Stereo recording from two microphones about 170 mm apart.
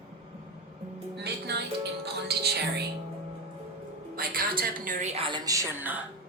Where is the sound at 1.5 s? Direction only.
75° right (ahead or behind).